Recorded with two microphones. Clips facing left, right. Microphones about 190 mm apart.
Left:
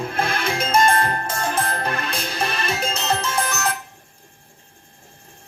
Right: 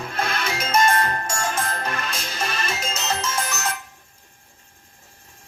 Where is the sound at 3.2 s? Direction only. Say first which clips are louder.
Left 3 dB; 60° left (ahead or behind).